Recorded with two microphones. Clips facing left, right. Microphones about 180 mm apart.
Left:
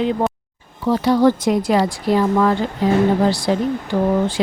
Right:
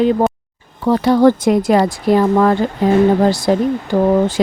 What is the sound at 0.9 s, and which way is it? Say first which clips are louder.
Speech: right 3 dB; 55° right (ahead or behind).